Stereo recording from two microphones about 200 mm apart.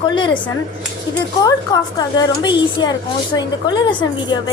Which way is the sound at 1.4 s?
20° left (ahead or behind).